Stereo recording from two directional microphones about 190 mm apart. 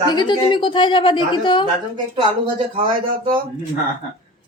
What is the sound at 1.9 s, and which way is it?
Speech, 25° right (ahead or behind).